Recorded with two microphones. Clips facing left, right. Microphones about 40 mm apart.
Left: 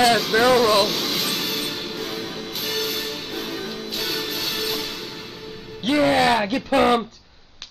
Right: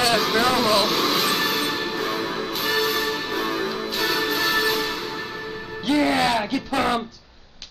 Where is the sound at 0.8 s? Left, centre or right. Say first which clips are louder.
Right 4 dB; centre.